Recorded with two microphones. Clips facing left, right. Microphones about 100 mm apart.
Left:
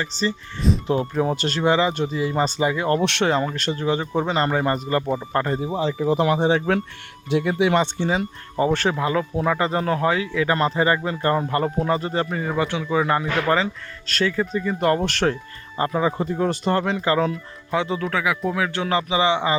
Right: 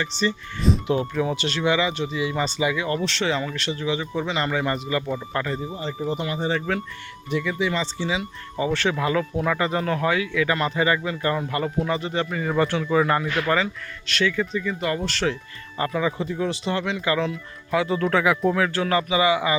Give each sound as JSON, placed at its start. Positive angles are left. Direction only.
{"t": 0.0, "sound": "speech", "side_deg": 35}
{"t": 3.3, "sound": "speech", "side_deg": 45}
{"t": 5.6, "sound": "speech", "side_deg": 90}
{"t": 7.3, "sound": "speech", "side_deg": 60}
{"t": 9.0, "sound": "speech", "side_deg": 25}
{"t": 12.5, "sound": "speech", "side_deg": 15}
{"t": 14.1, "sound": "speech", "side_deg": 40}
{"t": 14.8, "sound": "speech", "side_deg": 50}
{"t": 15.8, "sound": "speech", "side_deg": 30}
{"t": 17.7, "sound": "speech", "side_deg": 20}
{"t": 18.0, "sound": "speech", "side_deg": 0}
{"t": 18.7, "sound": "a man's voice", "side_deg": 20}